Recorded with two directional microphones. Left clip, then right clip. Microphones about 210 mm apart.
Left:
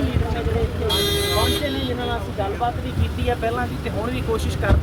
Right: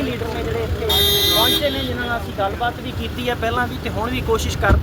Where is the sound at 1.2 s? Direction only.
45° right (ahead or behind).